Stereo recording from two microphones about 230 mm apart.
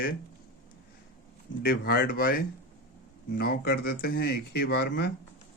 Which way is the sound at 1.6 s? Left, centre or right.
Left.